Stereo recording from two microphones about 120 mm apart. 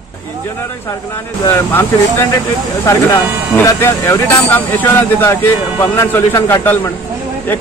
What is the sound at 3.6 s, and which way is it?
Speech, 20° left (ahead or behind).